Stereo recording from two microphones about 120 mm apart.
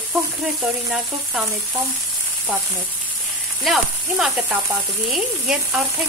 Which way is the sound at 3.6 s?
5° right (ahead or behind).